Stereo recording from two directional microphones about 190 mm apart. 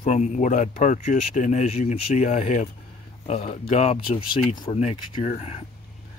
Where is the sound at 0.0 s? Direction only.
40° left (ahead or behind).